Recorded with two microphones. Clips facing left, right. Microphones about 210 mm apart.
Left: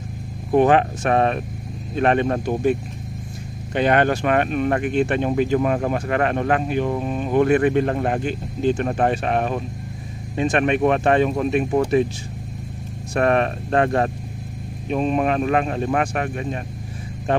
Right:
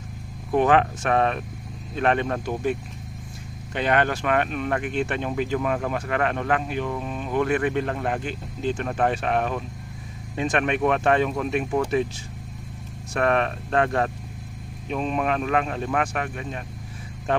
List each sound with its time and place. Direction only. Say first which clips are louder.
0.5 s speech: left 4 dB; 40° left (ahead or behind)
3.7 s speech: left 5 dB; 45° left (ahead or behind)
8.8 s speech: left 3 dB; 35° left (ahead or behind)
13.1 s speech: left 4 dB; 40° left (ahead or behind)